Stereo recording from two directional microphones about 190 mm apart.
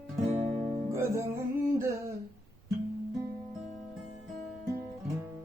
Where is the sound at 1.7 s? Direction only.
15° right (ahead or behind).